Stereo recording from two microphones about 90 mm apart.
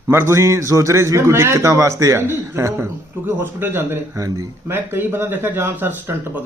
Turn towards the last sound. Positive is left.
turn(degrees=-25)  # may be behind; listen again after turning